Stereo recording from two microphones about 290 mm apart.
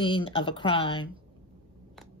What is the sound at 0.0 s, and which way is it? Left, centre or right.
Speech, centre.